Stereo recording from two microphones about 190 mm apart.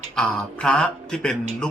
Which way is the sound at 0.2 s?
5° left (ahead or behind).